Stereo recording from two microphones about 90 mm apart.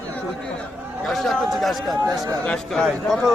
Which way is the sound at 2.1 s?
45° right (ahead or behind).